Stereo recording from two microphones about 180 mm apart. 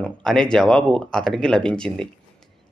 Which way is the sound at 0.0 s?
5° left (ahead or behind).